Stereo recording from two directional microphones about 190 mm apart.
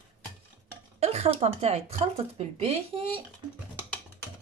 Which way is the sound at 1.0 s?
35° right (ahead or behind).